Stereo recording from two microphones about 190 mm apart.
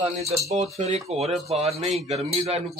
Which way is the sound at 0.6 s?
35° right (ahead or behind).